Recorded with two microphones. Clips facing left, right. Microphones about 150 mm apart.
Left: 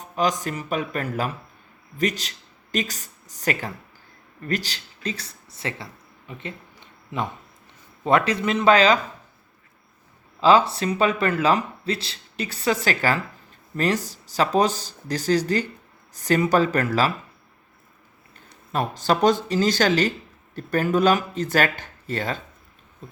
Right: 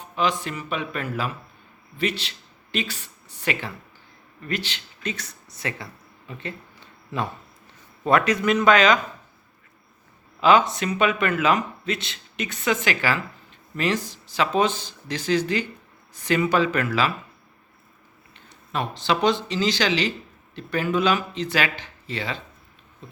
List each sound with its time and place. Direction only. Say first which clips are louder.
0.0 s a man's voice: left 1 dB; 40° left (ahead or behind); by 6.6 s 20° left (ahead or behind)
8.0 s speech: right 1 dB; 25° left (ahead or behind)
10.4 s a man's voice: left 1 dB; 30° left (ahead or behind)
18.3 s speech: left 2 dB; 45° left (ahead or behind)